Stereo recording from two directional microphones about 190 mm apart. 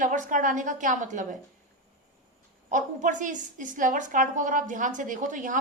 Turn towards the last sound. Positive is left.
turn(degrees=-40)  # may be behind; listen again after turning